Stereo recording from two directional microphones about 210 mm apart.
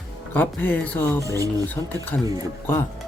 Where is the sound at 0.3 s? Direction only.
10° left (ahead or behind).